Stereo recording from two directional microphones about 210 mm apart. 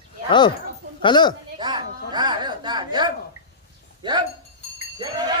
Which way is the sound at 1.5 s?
20° right (ahead or behind).